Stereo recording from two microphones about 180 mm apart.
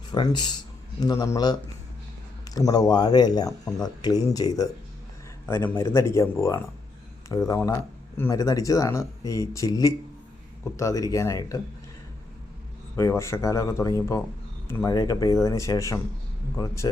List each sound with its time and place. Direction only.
0.1 s speech: 25° left (ahead or behind)
2.6 s speech: 20° left (ahead or behind)
13.0 s speech: 15° left (ahead or behind)